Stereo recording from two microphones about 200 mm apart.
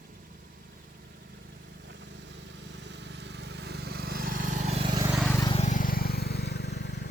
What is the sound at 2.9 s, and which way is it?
Vehicle, 60° right (ahead or behind).